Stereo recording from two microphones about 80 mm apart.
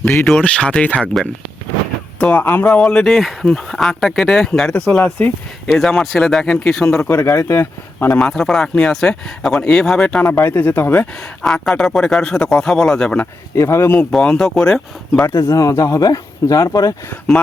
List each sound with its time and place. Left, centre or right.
0.3 s speech: centre
2.3 s speech: left
2.6 s speech: centre
7.1 s speech: left
7.9 s speech: centre
8.3 s speech: centre
10.2 s speech: left
11.4 s speech: centre
13.6 s speech: left
14.1 s speech: centre
15.4 s speech: left